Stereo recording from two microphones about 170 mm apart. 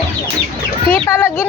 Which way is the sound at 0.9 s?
15° left (ahead or behind).